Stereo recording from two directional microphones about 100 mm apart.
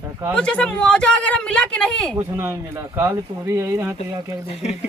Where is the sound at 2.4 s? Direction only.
30° right (ahead or behind).